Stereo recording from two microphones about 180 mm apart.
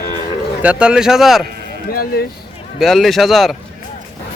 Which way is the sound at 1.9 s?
55° left (ahead or behind).